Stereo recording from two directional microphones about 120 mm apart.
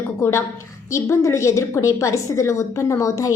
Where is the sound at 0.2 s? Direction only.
20° left (ahead or behind).